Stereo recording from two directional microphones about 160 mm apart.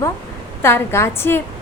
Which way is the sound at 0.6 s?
15° left (ahead or behind).